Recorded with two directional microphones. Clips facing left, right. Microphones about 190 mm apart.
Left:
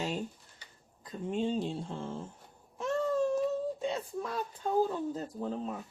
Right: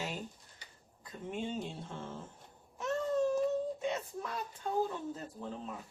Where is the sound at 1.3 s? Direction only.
30° left (ahead or behind).